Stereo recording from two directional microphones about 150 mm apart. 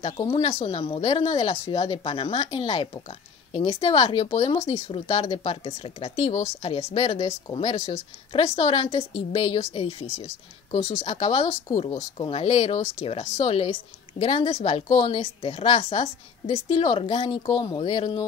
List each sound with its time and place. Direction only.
0.0 s a woman's voice: 40° left (ahead or behind)